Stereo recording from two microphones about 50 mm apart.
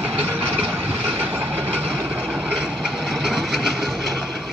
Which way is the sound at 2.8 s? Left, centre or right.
Centre.